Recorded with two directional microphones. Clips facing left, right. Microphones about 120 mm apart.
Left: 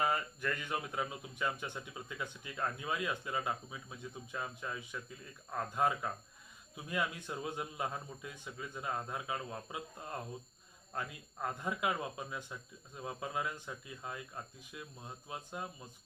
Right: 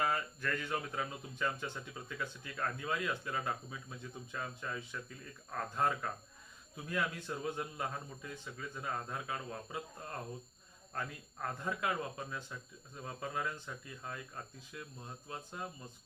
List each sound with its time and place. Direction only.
0.0 s speech: 15° left (ahead or behind)